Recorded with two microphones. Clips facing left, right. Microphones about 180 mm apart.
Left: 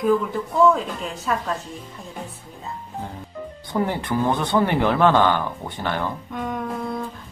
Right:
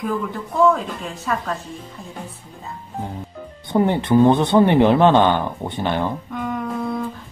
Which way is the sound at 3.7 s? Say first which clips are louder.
Right 6 dB; 25° right (ahead or behind).